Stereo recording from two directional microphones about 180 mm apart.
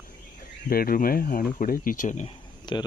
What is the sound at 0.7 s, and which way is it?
Speech, 55° left (ahead or behind).